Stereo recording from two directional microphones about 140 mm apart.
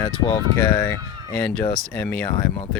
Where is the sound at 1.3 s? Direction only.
5° left (ahead or behind).